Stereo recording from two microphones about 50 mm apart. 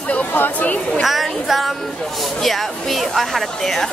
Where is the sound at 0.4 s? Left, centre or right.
Left.